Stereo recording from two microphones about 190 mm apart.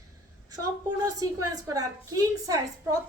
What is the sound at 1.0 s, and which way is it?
Speech, 15° right (ahead or behind).